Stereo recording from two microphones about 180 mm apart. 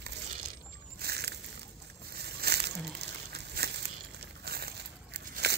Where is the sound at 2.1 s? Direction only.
60° right (ahead or behind).